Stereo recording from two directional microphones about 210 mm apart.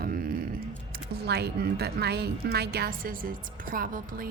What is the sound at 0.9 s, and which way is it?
A woman's voice, 50° right (ahead or behind).